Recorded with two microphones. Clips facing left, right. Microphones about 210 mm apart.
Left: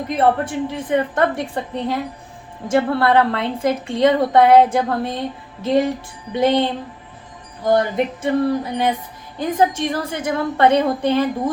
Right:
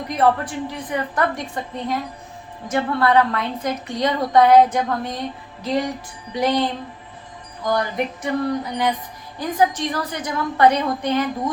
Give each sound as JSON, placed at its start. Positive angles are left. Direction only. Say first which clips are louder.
{"t": 0.1, "sound": "a woman's voice", "louder": "left 1 dB", "side_deg": 25}
{"t": 6.3, "sound": "a woman's voice", "louder": "left 3 dB", "side_deg": 25}